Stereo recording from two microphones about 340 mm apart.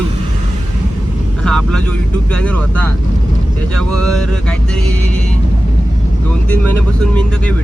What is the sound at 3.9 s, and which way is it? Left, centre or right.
Speech, centre.